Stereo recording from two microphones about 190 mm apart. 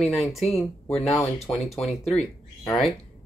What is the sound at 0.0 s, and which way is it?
Speech, centre (ahead or behind).